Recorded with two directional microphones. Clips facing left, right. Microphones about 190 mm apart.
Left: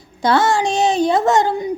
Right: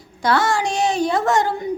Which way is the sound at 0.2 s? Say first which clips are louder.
Left 3 dB; 25° left (ahead or behind).